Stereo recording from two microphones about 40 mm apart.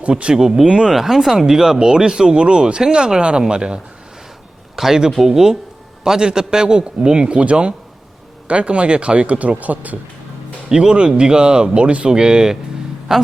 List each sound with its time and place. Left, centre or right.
0.1 s a man's voice: right
4.8 s a man's voice: centre; by 10.0 s right
10.7 s a man's voice: right